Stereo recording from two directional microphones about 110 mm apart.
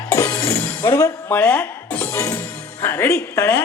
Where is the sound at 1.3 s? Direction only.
10° left (ahead or behind).